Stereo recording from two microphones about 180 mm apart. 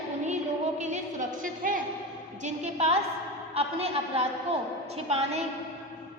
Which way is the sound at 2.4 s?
35° right (ahead or behind).